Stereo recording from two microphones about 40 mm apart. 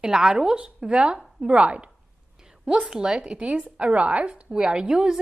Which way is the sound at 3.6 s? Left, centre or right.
Right.